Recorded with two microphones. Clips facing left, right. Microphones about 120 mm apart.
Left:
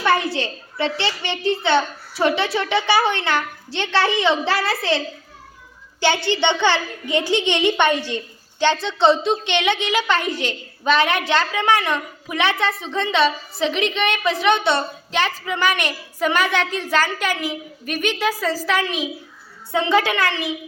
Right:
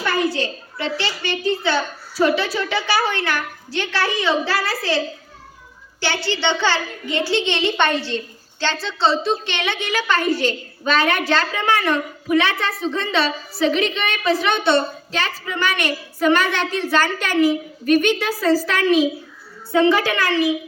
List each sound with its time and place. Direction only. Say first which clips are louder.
0.0 s a child's voice: left 1 dB; 25° left (ahead or behind)
19.9 s a child's voice: even; 25° left (ahead or behind)